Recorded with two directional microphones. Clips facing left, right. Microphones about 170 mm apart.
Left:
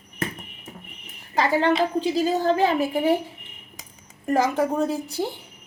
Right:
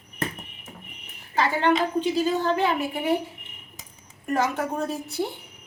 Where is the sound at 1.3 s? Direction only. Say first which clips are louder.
Left 2 dB; 35° left (ahead or behind).